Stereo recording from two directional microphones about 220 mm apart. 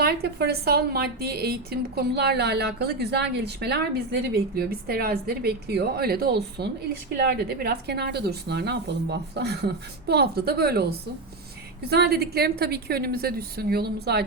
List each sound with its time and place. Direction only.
0.0 s a woman's voice: 45° right (ahead or behind)